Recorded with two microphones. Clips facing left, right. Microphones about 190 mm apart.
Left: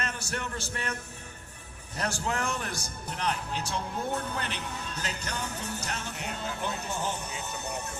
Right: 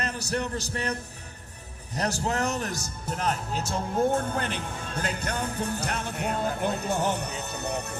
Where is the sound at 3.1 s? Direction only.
45° right (ahead or behind); by 7.2 s 65° right (ahead or behind).